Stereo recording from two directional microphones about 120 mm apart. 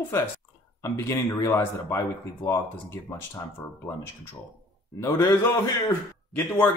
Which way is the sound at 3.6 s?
25° left (ahead or behind).